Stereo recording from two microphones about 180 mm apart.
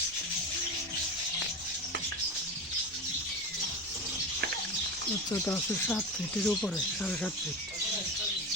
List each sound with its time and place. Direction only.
5.3 s speech: 15° left (ahead or behind)
6.4 s speech: 5° left (ahead or behind)